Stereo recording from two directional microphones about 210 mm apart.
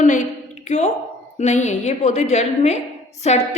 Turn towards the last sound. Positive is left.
turn(degrees=30)  # may be behind; listen again after turning